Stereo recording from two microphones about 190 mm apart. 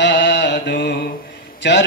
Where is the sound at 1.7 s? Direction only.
65° left (ahead or behind).